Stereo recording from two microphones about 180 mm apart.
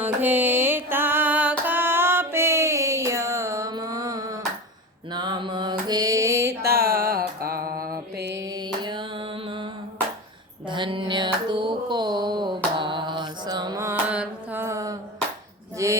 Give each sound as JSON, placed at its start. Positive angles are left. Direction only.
{"t": 0.0, "sound": "music", "side_deg": -10}
{"t": 5.1, "sound": "mantra", "side_deg": -25}
{"t": 6.7, "sound": "mantra", "side_deg": -60}
{"t": 8.4, "sound": "mantra", "side_deg": -25}
{"t": 10.7, "sound": "a sound", "side_deg": -25}
{"t": 11.4, "sound": "mantra", "side_deg": -25}
{"t": 15.8, "sound": "a sound", "side_deg": -15}